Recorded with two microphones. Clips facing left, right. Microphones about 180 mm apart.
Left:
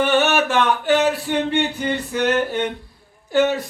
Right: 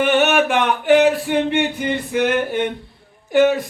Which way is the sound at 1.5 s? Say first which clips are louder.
Right 1 dB; 15° right (ahead or behind).